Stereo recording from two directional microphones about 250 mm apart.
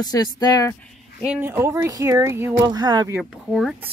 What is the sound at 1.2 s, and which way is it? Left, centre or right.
Speech, centre.